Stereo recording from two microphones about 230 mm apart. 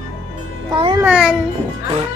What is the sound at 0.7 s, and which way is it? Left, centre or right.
Speech, right.